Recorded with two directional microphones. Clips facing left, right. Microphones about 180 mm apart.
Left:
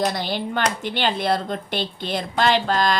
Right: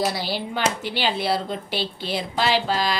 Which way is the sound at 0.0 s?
5° right (ahead or behind).